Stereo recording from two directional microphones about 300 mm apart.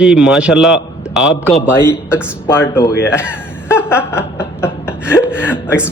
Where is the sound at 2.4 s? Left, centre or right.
Centre.